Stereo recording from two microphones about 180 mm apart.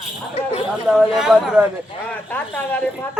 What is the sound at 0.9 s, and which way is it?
Speech, centre (ahead or behind).